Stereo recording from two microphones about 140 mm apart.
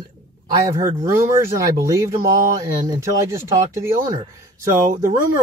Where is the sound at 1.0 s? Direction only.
20° right (ahead or behind).